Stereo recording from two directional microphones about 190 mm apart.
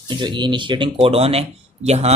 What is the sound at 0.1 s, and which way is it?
Speech, 25° right (ahead or behind).